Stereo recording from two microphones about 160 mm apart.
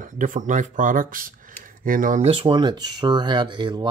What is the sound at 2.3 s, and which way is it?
Speech, 35° right (ahead or behind).